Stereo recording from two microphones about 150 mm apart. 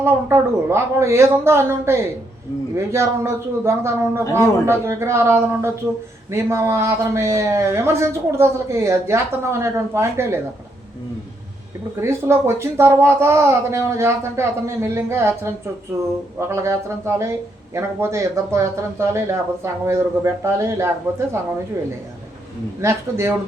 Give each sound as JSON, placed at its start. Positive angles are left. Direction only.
{"t": 0.0, "sound": "a man's voice", "side_deg": -15}
{"t": 11.9, "sound": "a man's voice", "side_deg": -15}
{"t": 22.8, "sound": "a man's voice", "side_deg": -20}